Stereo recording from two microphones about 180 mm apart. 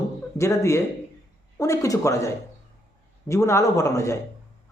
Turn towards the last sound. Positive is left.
turn(degrees=15)  # may be behind; listen again after turning